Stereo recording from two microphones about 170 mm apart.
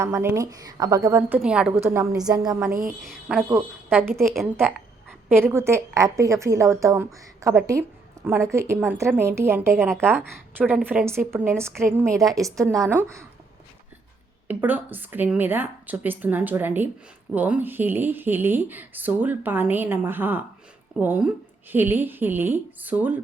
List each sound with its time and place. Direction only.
0.0 s a woman's voice: 15° right (ahead or behind)
3.0 s a woman's voice: centre (ahead or behind)
14.4 s a woman's voice: 10° right (ahead or behind)